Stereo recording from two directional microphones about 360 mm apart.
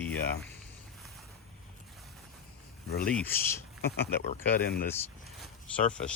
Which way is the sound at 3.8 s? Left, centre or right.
Left.